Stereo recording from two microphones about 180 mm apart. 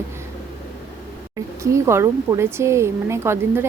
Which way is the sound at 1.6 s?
15° right (ahead or behind).